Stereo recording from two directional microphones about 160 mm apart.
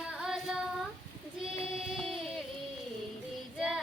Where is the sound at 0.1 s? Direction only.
5° right (ahead or behind).